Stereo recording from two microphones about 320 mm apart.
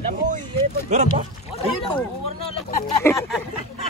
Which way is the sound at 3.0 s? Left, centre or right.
Centre.